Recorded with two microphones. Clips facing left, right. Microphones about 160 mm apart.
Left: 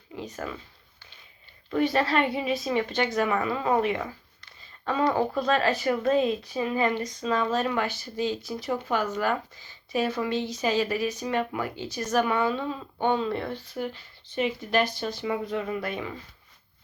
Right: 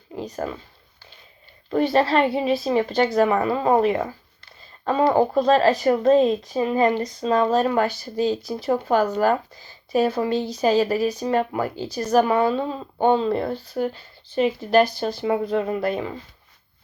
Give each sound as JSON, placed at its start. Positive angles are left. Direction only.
{"t": 0.1, "sound": "speech", "side_deg": -40}
{"t": 1.7, "sound": "speech", "side_deg": -30}